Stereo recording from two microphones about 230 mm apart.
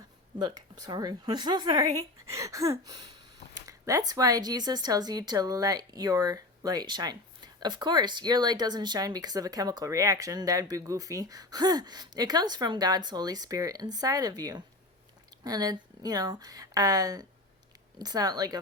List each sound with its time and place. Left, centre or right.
0.3 s speech: centre
3.7 s a sound: centre
4.1 s speech: centre